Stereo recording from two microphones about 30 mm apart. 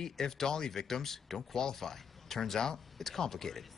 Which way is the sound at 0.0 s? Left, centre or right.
Centre.